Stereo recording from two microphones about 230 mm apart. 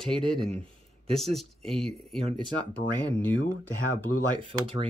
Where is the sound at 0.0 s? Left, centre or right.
Centre.